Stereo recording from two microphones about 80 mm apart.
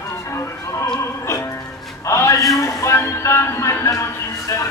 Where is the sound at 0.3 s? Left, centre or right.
Left.